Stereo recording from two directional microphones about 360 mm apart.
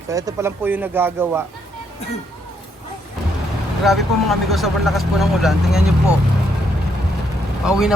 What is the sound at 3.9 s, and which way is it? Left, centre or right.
Speech, centre.